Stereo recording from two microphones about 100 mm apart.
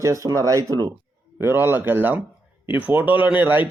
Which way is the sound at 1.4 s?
20° right (ahead or behind).